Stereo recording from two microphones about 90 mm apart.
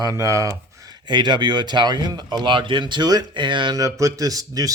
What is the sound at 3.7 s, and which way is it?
A man's voice, 35° right (ahead or behind).